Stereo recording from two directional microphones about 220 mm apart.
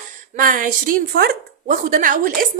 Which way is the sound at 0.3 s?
40° right (ahead or behind).